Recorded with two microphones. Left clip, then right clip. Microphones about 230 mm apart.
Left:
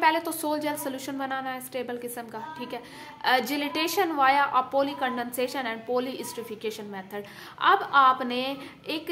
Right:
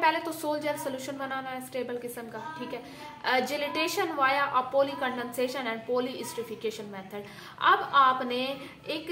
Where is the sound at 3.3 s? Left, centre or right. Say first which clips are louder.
Left 3 dB; left.